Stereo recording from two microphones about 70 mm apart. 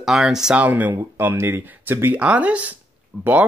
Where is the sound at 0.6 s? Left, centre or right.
Right.